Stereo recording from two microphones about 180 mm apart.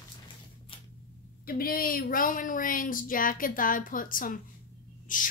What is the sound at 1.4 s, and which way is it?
Speech, 55° left (ahead or behind).